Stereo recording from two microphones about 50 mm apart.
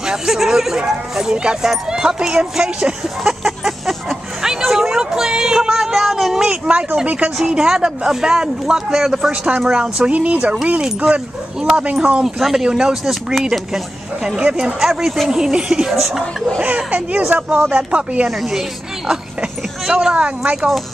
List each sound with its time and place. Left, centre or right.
0.0 s speech: centre
3.4 s a sound: centre
6.4 s speech: right
7.3 s speech: centre; by 12.2 s right
12.2 s speech: centre
14.2 s speech: centre
14.9 s speech: centre
16.6 s speech: right
19.9 s speech: centre
20.2 s speech: right